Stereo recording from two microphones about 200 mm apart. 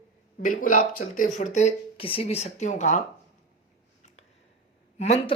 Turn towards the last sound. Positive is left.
turn(degrees=35)  # may be behind; listen again after turning